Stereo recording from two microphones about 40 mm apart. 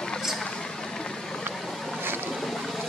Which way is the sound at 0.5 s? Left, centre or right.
Centre.